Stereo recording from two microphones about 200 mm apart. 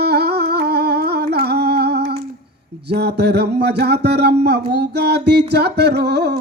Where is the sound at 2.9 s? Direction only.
55° right (ahead or behind).